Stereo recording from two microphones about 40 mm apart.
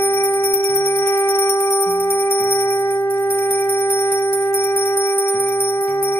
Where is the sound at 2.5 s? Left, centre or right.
Left.